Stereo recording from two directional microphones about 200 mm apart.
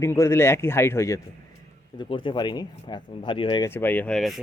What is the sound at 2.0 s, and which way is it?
Speech, 25° left (ahead or behind).